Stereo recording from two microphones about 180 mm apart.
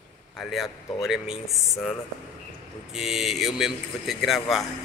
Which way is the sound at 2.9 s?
Centre (ahead or behind).